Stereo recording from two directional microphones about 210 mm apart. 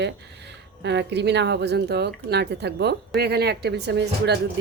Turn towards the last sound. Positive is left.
turn(degrees=-55)  # may be behind; listen again after turning